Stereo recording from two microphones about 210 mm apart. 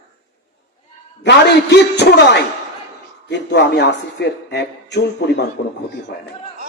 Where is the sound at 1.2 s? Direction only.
55° left (ahead or behind).